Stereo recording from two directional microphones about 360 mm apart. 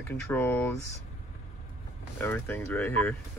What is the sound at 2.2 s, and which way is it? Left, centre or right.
Speech, centre.